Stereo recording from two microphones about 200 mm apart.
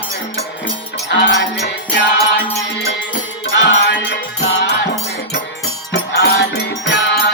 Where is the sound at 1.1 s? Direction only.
60° left (ahead or behind).